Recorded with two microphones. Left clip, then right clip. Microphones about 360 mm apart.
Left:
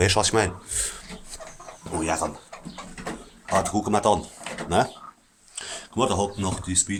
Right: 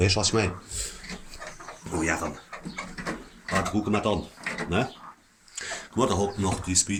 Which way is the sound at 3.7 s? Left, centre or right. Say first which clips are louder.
Left 5 dB; centre.